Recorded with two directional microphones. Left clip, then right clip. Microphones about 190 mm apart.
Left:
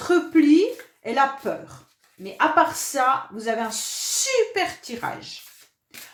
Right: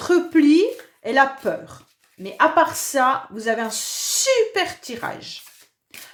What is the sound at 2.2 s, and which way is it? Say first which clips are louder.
Speech: right 2 dB; 40° right (ahead or behind).